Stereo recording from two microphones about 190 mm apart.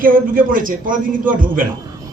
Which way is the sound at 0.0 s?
45° right (ahead or behind).